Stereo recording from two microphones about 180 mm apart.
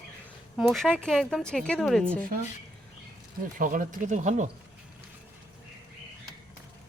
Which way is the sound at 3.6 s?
50° right (ahead or behind).